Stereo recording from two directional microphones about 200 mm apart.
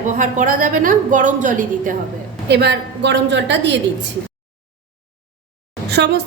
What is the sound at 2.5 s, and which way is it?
A woman's voice, 60° right (ahead or behind).